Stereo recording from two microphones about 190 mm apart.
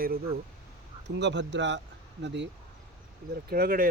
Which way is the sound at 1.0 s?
65° right (ahead or behind).